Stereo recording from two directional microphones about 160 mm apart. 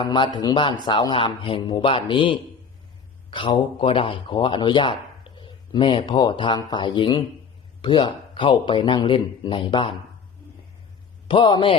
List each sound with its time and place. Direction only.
0.0 s a man's voice: 30° left (ahead or behind)
11.3 s a man's voice: 30° left (ahead or behind)